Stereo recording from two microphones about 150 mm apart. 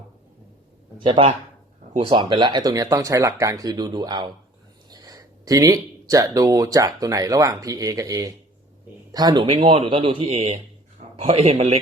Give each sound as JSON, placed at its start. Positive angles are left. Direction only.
{"t": 1.0, "sound": "speech", "side_deg": -40}
{"t": 9.5, "sound": "speech", "side_deg": -40}